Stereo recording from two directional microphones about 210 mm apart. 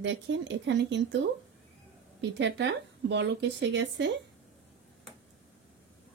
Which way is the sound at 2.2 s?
55° right (ahead or behind).